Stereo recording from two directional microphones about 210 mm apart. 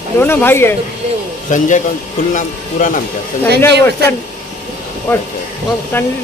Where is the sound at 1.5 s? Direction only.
35° left (ahead or behind).